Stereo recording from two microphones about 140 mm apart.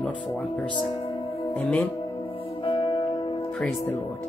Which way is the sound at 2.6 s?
35° left (ahead or behind).